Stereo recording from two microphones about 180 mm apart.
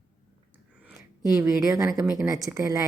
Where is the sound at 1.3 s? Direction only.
15° right (ahead or behind).